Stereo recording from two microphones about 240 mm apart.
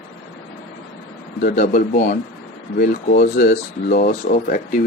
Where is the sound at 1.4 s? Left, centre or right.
Left.